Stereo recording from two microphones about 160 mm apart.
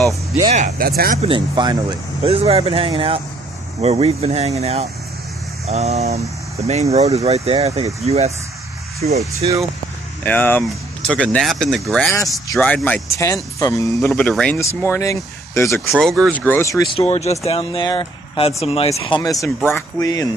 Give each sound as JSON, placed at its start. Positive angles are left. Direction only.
{"t": 0.5, "sound": "speech", "side_deg": -45}
{"t": 0.7, "sound": "speech", "side_deg": -70}
{"t": 1.2, "sound": "speech", "side_deg": -30}
{"t": 2.2, "sound": "speech", "side_deg": -40}
{"t": 9.0, "sound": "speech", "side_deg": -50}
{"t": 9.4, "sound": "speech", "side_deg": -35}
{"t": 10.2, "sound": "speech", "side_deg": 10}
{"t": 13.9, "sound": "speech", "side_deg": 5}
{"t": 14.8, "sound": "speech", "side_deg": 20}
{"t": 15.9, "sound": "speech", "side_deg": 0}
{"t": 16.3, "sound": "speech", "side_deg": 10}
{"t": 16.9, "sound": "speech", "side_deg": 40}
{"t": 17.5, "sound": "speech", "side_deg": 30}
{"t": 19.0, "sound": "speech", "side_deg": 25}